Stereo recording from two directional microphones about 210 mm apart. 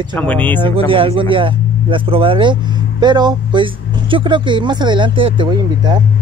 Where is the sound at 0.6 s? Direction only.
25° right (ahead or behind).